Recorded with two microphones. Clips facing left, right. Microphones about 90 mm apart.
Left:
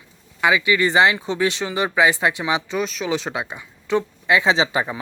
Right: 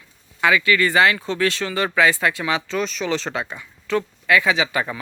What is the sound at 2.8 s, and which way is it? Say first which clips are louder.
Speech: even; 5° left (ahead or behind).